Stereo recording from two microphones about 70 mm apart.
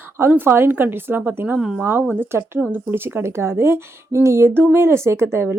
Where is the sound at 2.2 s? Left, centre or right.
Right.